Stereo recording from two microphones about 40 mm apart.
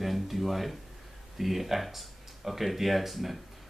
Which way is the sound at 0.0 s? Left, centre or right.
Centre.